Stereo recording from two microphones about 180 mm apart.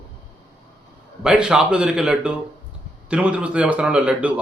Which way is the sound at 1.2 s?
5° right (ahead or behind).